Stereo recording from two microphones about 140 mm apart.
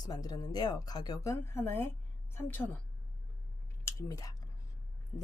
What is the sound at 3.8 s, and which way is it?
Speech, 25° left (ahead or behind).